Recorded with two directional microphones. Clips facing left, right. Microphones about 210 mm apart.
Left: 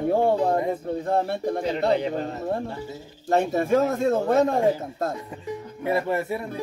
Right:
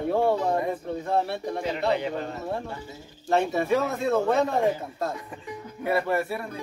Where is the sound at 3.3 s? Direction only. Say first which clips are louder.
Left 2 dB; 45° left (ahead or behind).